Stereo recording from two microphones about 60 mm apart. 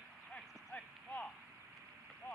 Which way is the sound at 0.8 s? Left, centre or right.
Left.